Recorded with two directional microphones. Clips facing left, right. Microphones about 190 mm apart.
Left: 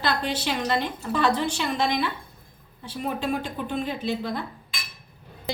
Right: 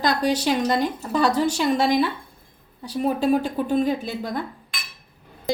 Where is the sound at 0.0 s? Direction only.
40° right (ahead or behind).